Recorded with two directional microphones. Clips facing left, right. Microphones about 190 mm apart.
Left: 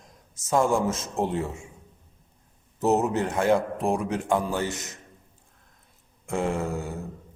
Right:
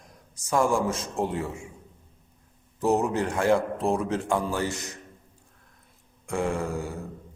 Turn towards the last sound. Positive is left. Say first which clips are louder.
# left 1 dB
turn(degrees=20)  # may be behind; listen again after turning